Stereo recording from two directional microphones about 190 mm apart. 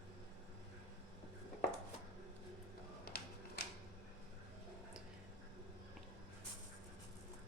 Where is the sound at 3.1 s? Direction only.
55° left (ahead or behind).